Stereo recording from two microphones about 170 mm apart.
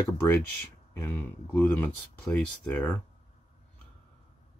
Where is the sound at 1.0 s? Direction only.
10° left (ahead or behind).